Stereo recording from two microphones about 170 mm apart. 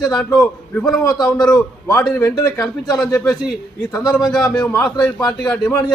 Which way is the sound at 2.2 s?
20° left (ahead or behind).